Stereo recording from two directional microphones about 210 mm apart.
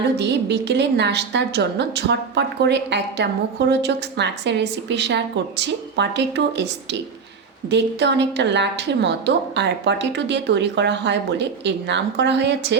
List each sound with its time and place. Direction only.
0.2 s a woman's voice: 55° right (ahead or behind)
7.7 s a woman's voice: 55° right (ahead or behind)